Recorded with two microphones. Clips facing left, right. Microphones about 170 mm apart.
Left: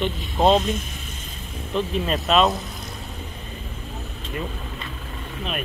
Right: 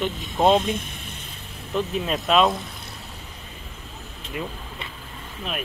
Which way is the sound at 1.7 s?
5° right (ahead or behind).